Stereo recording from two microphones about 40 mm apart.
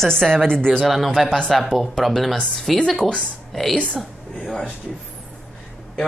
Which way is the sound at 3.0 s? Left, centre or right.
Centre.